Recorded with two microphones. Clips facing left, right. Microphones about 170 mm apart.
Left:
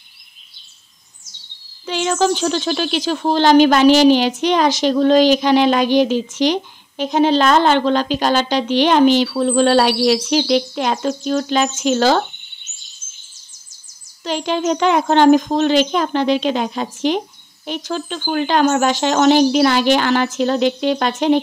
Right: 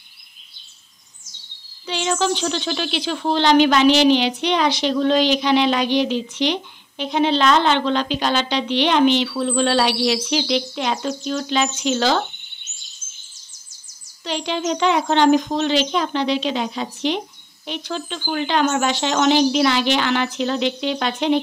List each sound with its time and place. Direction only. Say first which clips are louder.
1.9 s speech: left 4 dB; 45° left (ahead or behind)
14.2 s speech: left 4 dB; 45° left (ahead or behind)